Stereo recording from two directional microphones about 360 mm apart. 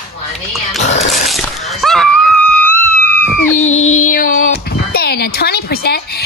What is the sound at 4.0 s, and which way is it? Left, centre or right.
Speech, left.